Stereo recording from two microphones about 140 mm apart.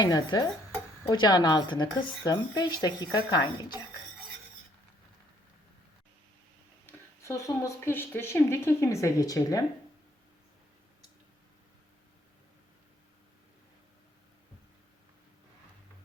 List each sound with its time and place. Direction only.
0.0 s speech: 30° left (ahead or behind)
6.8 s speech: 20° left (ahead or behind)